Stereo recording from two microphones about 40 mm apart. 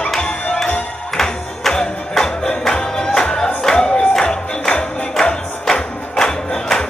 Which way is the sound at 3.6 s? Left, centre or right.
Centre.